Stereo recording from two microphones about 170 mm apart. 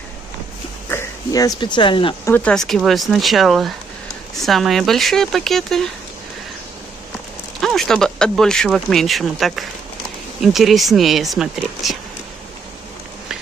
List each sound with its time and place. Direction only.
0.8 s speech: 15° left (ahead or behind)
2.2 s speech: 10° left (ahead or behind)
7.6 s speech: centre (ahead or behind)